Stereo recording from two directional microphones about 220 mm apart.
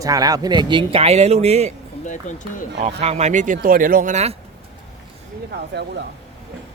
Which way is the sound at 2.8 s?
30° right (ahead or behind).